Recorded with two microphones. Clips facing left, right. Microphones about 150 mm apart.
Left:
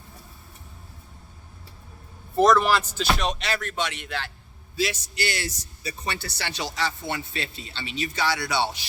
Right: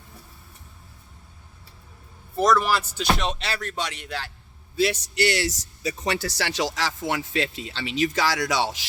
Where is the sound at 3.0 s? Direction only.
25° right (ahead or behind).